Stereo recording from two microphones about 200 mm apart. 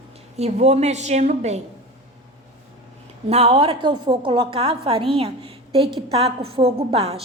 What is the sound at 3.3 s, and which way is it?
A woman's voice, 30° right (ahead or behind).